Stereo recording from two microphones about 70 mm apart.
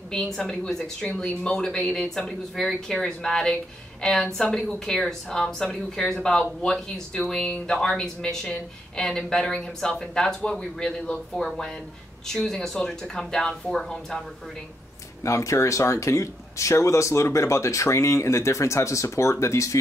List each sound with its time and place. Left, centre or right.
0.4 s a woman's voice: centre
15.2 s speech: left